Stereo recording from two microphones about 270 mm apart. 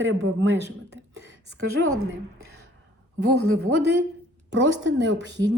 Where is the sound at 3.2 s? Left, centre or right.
Right.